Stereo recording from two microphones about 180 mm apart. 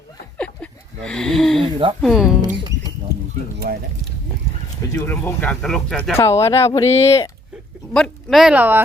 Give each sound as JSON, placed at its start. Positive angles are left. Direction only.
{"t": 0.3, "sound": "a sound", "side_deg": 5}
{"t": 1.6, "sound": "speech", "side_deg": -30}
{"t": 2.0, "sound": "speech", "side_deg": 0}
{"t": 3.6, "sound": "speech", "side_deg": -55}
{"t": 4.9, "sound": "speech", "side_deg": 10}
{"t": 6.1, "sound": "speech", "side_deg": 15}
{"t": 7.9, "sound": "speech", "side_deg": 0}